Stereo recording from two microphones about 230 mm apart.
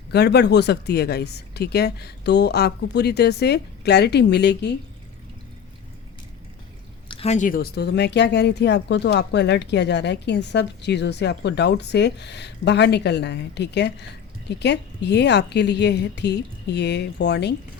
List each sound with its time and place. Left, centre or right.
0.1 s speech: left
7.1 s speech: left